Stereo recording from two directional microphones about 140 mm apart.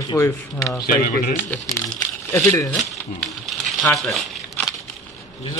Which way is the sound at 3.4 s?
5° left (ahead or behind).